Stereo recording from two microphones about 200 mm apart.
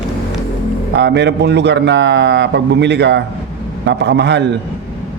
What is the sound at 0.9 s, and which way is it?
A man's voice, 60° right (ahead or behind).